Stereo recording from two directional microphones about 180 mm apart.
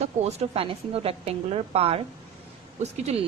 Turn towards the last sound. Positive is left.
turn(degrees=-35)  # may be behind; listen again after turning